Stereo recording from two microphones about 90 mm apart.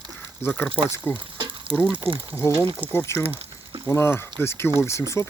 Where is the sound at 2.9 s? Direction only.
30° left (ahead or behind).